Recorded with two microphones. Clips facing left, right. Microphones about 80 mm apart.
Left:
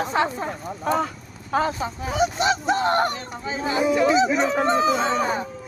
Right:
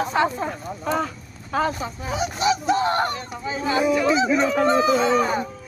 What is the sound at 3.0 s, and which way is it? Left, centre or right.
Speech, left.